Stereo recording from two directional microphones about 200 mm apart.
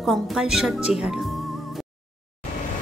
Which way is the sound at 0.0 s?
Centre (ahead or behind).